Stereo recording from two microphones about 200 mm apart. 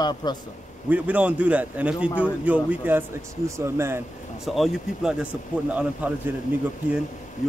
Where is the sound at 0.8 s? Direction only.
5° right (ahead or behind).